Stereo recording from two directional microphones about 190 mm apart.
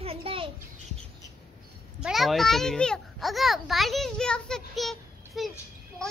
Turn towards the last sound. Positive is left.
turn(degrees=0)  # may be behind; listen again after turning